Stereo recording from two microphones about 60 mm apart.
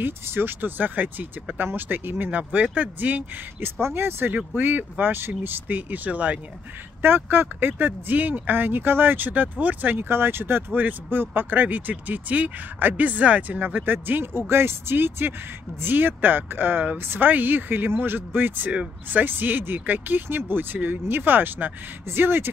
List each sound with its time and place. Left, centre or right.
0.0 s speech: right
3.8 s speech: right
7.0 s speech: right